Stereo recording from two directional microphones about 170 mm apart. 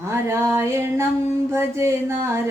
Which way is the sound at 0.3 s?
15° right (ahead or behind).